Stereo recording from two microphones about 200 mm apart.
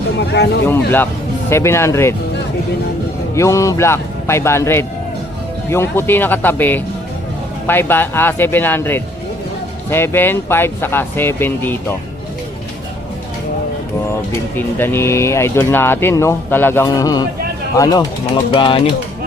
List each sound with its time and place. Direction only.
0.2 s speech: 55° left (ahead or behind)
1.5 s speech: 15° left (ahead or behind)
3.3 s speech: 15° left (ahead or behind)
14.5 s speech: 10° left (ahead or behind)